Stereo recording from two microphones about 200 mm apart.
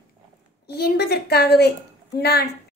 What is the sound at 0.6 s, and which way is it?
Speech, 55° left (ahead or behind).